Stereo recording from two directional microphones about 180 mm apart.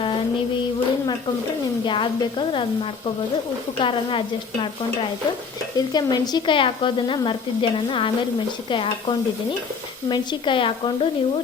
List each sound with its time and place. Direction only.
1.8 s speech: 25° left (ahead or behind)
3.8 s speech: 30° left (ahead or behind)
5.7 s speech: 25° left (ahead or behind)